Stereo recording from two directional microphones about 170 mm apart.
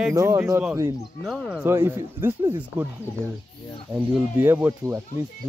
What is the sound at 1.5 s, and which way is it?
Speech, 15° right (ahead or behind).